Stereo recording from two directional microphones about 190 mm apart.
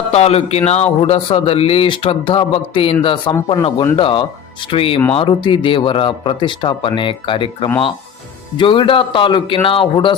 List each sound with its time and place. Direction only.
0.1 s speech: 35° left (ahead or behind)